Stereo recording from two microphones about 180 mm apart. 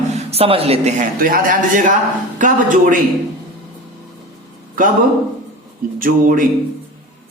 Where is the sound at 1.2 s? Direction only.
50° right (ahead or behind).